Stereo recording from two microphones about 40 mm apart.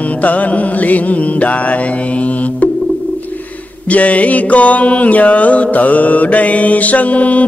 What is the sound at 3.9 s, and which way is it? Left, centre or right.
Music, left.